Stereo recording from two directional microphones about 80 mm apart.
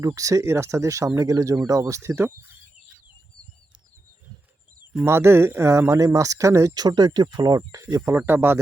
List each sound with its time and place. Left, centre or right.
0.0 s speech: right
5.0 s speech: right
6.7 s speech: right
8.3 s speech: right